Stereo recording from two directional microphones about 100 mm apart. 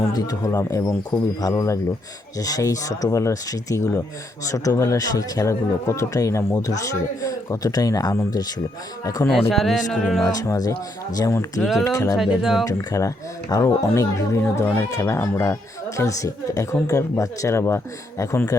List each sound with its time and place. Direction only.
0.1 s speech: 35° left (ahead or behind)
9.5 s music: centre (ahead or behind)
10.3 s speech: 35° left (ahead or behind)
12.1 s music: 5° right (ahead or behind)
12.6 s a child's voice: 35° left (ahead or behind)